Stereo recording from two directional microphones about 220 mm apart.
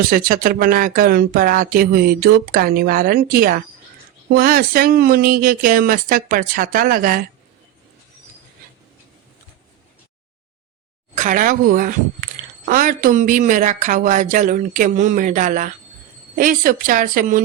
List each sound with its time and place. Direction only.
0.1 s speech: 40° right (ahead or behind)
11.1 s speech: 35° right (ahead or behind)